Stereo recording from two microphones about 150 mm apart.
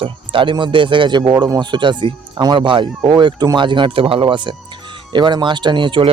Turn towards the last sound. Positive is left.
turn(degrees=-30)  # may be behind; listen again after turning